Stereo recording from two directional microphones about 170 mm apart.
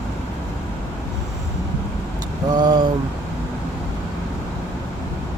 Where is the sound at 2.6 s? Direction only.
25° right (ahead or behind).